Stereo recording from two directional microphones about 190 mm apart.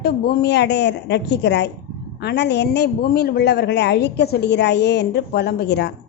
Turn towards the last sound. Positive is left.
turn(degrees=60)  # may be behind; listen again after turning